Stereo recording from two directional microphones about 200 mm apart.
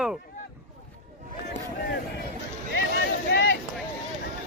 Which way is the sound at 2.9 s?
55° left (ahead or behind).